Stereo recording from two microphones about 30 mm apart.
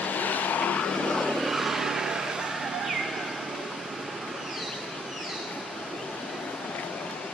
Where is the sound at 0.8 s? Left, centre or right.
Left.